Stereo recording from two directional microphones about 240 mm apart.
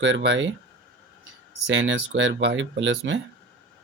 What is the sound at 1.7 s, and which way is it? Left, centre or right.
Speech, right.